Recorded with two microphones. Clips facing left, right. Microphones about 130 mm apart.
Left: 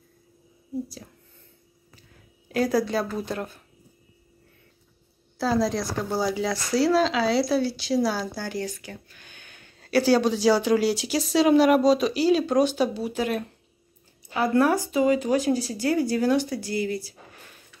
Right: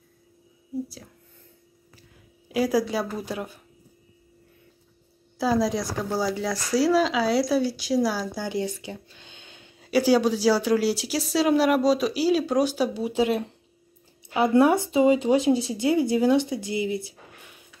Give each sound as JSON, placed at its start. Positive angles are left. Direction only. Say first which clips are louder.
{"t": 2.0, "sound": "speech", "louder": "even", "side_deg": -10}
{"t": 5.4, "sound": "speech", "louder": "right 1 dB", "side_deg": -10}
{"t": 9.8, "sound": "speech", "louder": "even", "side_deg": -10}
{"t": 13.0, "sound": "speech", "louder": "right 3 dB", "side_deg": -25}